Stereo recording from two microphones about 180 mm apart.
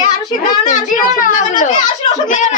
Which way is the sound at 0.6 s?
45° left (ahead or behind).